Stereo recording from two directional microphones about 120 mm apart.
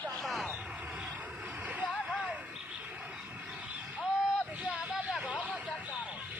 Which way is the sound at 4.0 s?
5° right (ahead or behind).